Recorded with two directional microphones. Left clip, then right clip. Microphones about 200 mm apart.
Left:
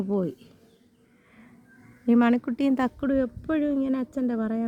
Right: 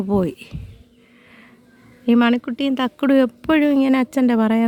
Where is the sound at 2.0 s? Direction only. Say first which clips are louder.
Right 5 dB; centre (ahead or behind).